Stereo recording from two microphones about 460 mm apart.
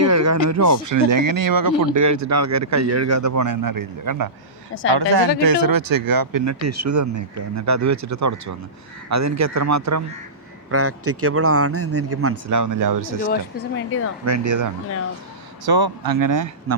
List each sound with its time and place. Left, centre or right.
0.0 s speech: right
4.7 s a woman's voice: left
4.9 s a woman's voice: right
15.6 s speech: right